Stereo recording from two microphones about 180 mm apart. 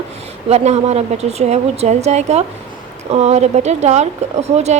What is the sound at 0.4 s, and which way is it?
A woman's voice, 35° right (ahead or behind).